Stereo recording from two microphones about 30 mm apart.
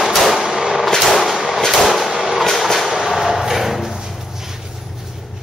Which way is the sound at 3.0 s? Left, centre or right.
Centre.